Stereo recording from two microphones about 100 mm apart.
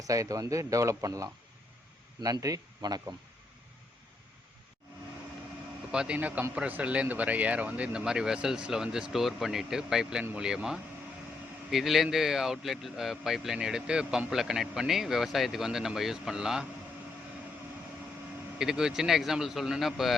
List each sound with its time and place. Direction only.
0.0 s speech: 35° right (ahead or behind)
5.9 s speech: 10° right (ahead or behind)
18.6 s speech: 5° right (ahead or behind)